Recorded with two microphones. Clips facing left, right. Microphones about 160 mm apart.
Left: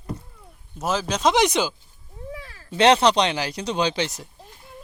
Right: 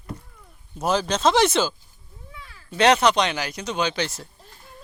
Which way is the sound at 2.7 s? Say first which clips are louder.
Left 1 dB; 25° left (ahead or behind).